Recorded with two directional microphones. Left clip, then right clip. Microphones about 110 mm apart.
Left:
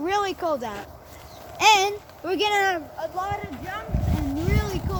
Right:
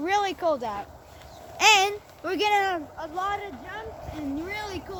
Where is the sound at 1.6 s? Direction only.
20° right (ahead or behind).